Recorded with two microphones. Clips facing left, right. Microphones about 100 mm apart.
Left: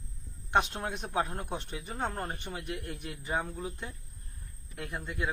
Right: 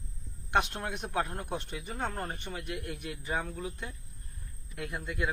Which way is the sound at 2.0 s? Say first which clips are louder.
Left 1 dB; 15° left (ahead or behind).